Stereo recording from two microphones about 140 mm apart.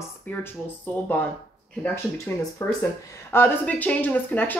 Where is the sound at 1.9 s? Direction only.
20° left (ahead or behind).